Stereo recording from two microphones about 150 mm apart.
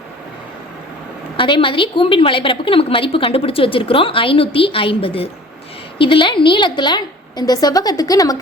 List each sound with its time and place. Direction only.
1.4 s a woman's voice: 35° left (ahead or behind)